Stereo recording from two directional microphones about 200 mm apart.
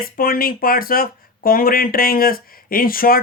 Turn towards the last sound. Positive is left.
turn(degrees=45)  # may be behind; listen again after turning